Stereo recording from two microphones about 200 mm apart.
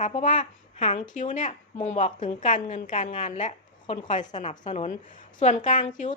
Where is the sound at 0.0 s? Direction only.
35° left (ahead or behind).